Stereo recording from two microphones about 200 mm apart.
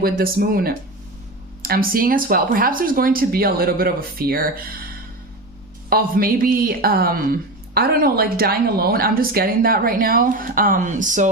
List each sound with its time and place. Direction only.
0.0 s speech: 45° right (ahead or behind)
5.9 s speech: 45° right (ahead or behind)